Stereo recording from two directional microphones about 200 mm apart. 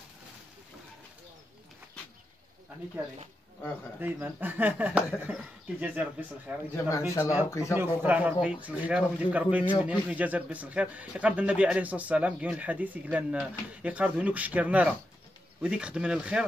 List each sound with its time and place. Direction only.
4.0 s a man's voice: 10° right (ahead or behind)
6.7 s speech: 15° left (ahead or behind)
7.7 s a man's voice: 10° right (ahead or behind)